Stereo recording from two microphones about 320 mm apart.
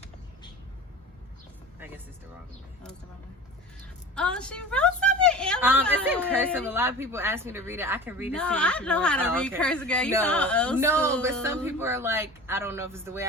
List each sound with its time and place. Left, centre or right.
4.1 s a sound: centre
6.1 s a woman's voice: centre
10.8 s a woman's voice: centre